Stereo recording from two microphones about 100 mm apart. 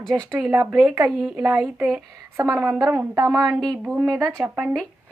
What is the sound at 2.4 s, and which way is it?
Speech, 35° right (ahead or behind).